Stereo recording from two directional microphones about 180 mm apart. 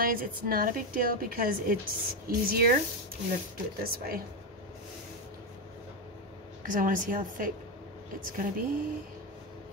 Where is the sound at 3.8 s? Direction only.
55° right (ahead or behind).